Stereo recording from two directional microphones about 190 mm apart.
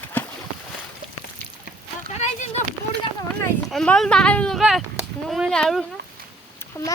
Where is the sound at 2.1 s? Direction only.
35° left (ahead or behind).